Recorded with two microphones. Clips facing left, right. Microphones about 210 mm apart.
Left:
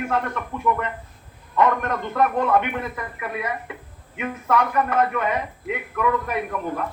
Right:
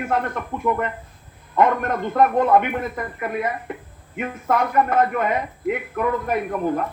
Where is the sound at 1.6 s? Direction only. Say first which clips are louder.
Right 2 dB; 45° right (ahead or behind).